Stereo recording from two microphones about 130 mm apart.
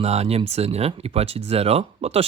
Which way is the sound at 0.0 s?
55° right (ahead or behind).